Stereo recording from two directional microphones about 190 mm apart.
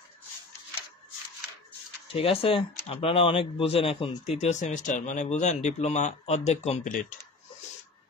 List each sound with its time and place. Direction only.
2.1 s speech: 30° left (ahead or behind)